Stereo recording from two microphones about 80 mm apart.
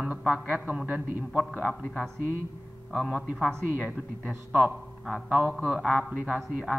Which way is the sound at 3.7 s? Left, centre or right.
Centre.